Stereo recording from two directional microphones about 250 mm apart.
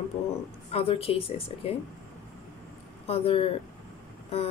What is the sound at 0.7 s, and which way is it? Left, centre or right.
Speech, left.